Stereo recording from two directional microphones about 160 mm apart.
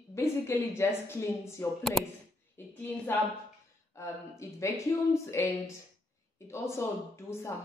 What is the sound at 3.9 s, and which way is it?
A woman's voice, 15° left (ahead or behind).